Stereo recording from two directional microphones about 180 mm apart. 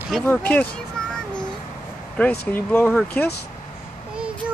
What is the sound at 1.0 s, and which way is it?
Child singing, 5° left (ahead or behind).